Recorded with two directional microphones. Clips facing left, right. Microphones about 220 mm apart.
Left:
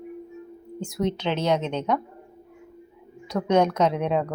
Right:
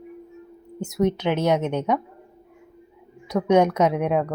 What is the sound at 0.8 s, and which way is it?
Speech, 20° right (ahead or behind).